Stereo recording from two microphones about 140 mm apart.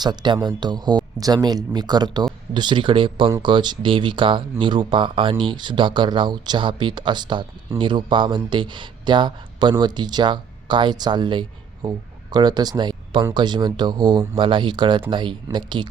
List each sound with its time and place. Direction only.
0.0 s speech: 30° right (ahead or behind)